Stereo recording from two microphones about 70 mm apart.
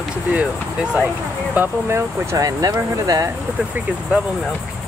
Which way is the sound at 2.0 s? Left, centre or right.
Right.